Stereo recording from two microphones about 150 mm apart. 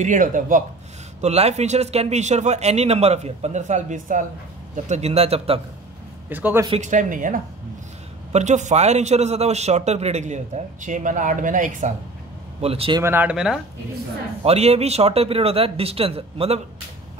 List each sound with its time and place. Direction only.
0.0 s speech: 60° right (ahead or behind)
1.2 s a man's voice: 45° right (ahead or behind)
6.2 s a man's voice: 10° right (ahead or behind)
6.8 s speech: 55° right (ahead or behind)
8.3 s a man's voice: 50° right (ahead or behind)
12.6 s speech: 40° right (ahead or behind)
13.0 s speech: 15° right (ahead or behind)
14.4 s speech: 45° right (ahead or behind)